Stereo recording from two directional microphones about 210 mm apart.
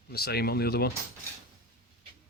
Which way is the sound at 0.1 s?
50° left (ahead or behind).